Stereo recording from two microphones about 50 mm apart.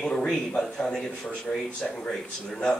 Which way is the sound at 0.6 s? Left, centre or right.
Centre.